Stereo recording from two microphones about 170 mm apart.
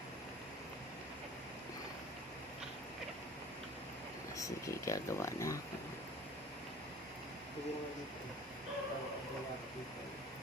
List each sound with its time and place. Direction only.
4.4 s speech: 20° left (ahead or behind)